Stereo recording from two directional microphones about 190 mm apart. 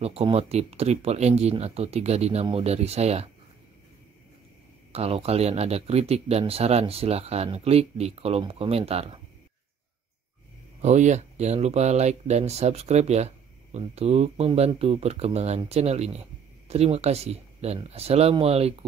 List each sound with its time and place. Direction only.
0.0 s speech: 30° right (ahead or behind)
4.9 s speech: 30° right (ahead or behind)
10.8 s speech: 35° right (ahead or behind)